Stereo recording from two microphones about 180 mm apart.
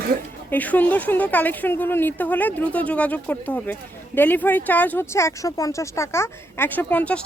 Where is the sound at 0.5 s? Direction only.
10° left (ahead or behind).